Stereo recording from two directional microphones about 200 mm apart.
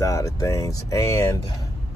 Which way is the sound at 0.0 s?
15° left (ahead or behind).